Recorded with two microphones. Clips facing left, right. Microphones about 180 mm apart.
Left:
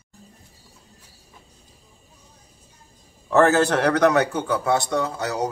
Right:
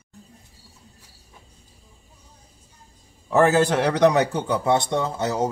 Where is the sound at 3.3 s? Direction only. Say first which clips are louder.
Left 1 dB; 10° right (ahead or behind).